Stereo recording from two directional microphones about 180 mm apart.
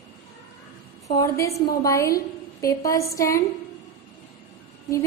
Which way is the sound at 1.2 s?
15° left (ahead or behind).